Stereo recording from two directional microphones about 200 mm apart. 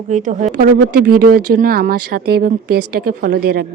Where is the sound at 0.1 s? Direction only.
35° right (ahead or behind).